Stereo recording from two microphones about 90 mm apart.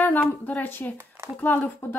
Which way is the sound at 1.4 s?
20° left (ahead or behind).